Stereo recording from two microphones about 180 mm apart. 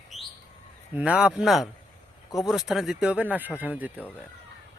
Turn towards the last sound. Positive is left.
turn(degrees=-10)  # may be behind; listen again after turning